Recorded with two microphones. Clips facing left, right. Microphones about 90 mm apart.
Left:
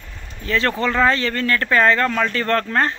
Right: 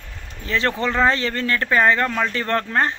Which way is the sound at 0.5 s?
20° right (ahead or behind).